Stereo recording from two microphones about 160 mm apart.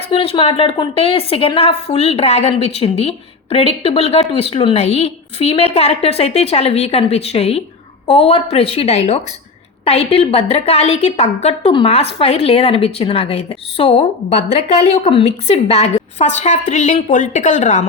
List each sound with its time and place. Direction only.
0.1 s a woman's voice: 35° left (ahead or behind)